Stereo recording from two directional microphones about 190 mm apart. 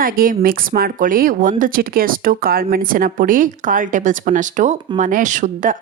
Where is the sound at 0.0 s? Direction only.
50° right (ahead or behind).